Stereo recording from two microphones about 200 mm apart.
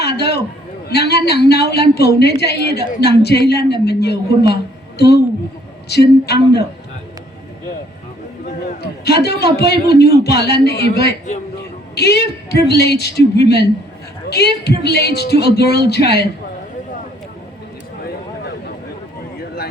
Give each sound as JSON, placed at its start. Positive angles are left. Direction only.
{"t": 0.0, "sound": "a sound", "side_deg": 55}
{"t": 0.9, "sound": "a woman's voice", "side_deg": 55}
{"t": 8.8, "sound": "a man's voice", "side_deg": 55}